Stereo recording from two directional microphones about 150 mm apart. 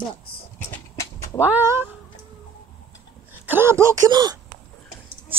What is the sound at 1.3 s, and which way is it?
Speech, 10° right (ahead or behind).